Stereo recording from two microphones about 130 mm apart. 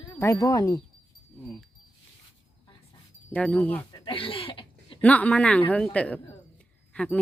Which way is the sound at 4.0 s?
40° left (ahead or behind).